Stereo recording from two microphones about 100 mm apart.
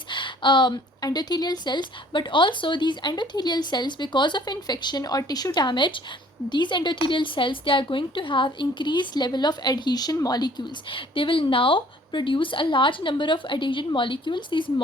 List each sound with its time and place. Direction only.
0.1 s a woman's voice: 55° left (ahead or behind)
5.5 s a woman's voice: 50° left (ahead or behind)
10.8 s a woman's voice: 60° left (ahead or behind)